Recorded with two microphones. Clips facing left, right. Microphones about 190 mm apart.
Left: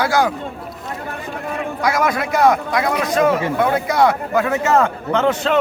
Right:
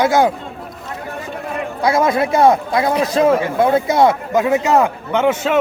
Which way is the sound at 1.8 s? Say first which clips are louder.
Right 4 dB; 25° right (ahead or behind).